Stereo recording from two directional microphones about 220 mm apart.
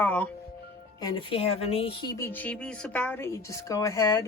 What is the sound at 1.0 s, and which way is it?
Speech, 25° left (ahead or behind).